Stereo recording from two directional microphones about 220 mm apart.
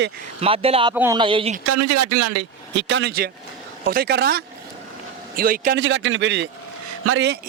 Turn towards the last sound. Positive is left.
turn(degrees=-85)